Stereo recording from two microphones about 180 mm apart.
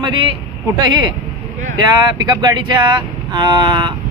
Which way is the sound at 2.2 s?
25° right (ahead or behind).